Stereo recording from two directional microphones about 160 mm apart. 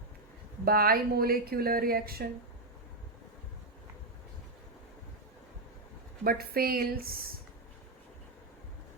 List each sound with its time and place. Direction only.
0.6 s a woman's voice: 70° right (ahead or behind)
6.2 s a woman's voice: 70° right (ahead or behind)